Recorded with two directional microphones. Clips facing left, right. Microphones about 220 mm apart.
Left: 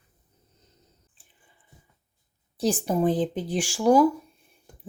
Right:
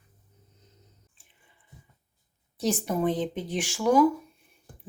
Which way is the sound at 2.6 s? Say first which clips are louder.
Left 3 dB; 30° left (ahead or behind).